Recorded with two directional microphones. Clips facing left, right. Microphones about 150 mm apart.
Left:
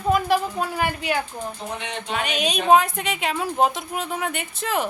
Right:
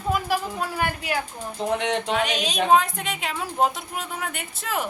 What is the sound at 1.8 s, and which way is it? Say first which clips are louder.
Music: right 6 dB; 90° right.